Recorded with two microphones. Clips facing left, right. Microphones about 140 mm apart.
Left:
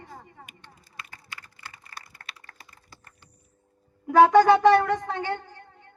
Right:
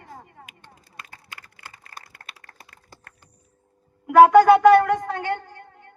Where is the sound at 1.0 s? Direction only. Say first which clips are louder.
Even; 50° right (ahead or behind).